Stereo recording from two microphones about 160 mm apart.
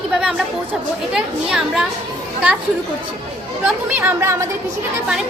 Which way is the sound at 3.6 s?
10° right (ahead or behind).